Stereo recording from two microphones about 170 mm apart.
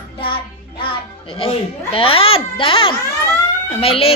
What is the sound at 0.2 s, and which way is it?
Music, 30° left (ahead or behind).